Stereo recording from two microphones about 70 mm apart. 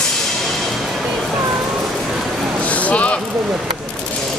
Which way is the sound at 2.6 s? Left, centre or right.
Centre.